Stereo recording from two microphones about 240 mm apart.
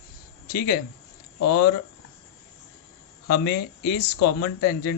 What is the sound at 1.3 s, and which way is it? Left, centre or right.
Speech, left.